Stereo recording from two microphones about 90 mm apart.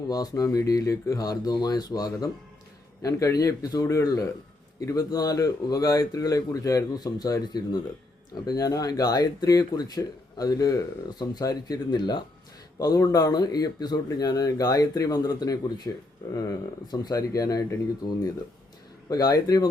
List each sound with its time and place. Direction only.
0.1 s speech: 45° left (ahead or behind)
8.4 s speech: 40° left (ahead or behind)
12.8 s speech: 40° left (ahead or behind)
16.3 s speech: 45° left (ahead or behind)
19.1 s speech: 45° left (ahead or behind)